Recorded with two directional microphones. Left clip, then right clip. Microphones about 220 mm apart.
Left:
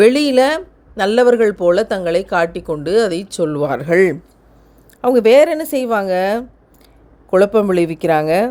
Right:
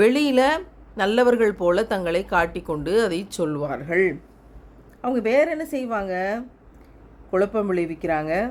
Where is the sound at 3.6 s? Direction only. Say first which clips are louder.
Left 10 dB; 40° left (ahead or behind).